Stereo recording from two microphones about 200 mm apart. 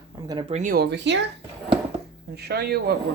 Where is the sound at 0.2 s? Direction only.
20° right (ahead or behind); by 1.2 s 60° right (ahead or behind).